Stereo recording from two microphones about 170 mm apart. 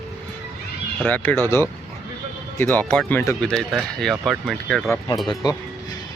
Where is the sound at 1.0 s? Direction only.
10° left (ahead or behind).